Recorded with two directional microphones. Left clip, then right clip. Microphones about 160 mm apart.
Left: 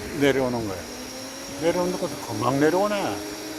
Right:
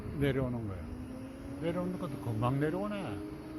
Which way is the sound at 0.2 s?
30° left (ahead or behind).